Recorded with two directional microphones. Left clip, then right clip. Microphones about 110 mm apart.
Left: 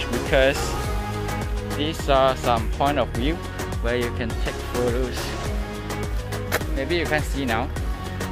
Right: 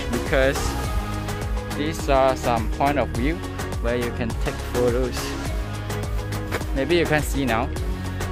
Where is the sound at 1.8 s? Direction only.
30° right (ahead or behind).